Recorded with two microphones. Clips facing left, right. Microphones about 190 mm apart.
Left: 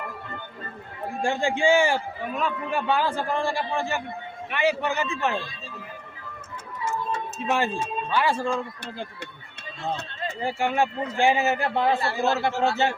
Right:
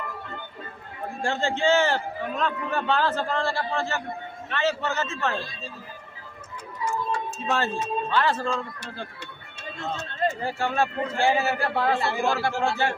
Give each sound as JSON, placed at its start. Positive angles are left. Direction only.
{"t": 1.2, "sound": "a man's voice", "side_deg": 15}
{"t": 7.1, "sound": "music", "side_deg": 20}
{"t": 8.1, "sound": "a man's voice", "side_deg": 10}
{"t": 10.4, "sound": "a man's voice", "side_deg": 15}
{"t": 11.9, "sound": "a man's voice", "side_deg": -20}
{"t": 12.4, "sound": "a man's voice", "side_deg": 20}